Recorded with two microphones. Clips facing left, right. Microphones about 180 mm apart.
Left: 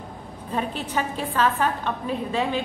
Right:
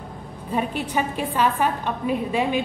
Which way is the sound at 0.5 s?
10° right (ahead or behind).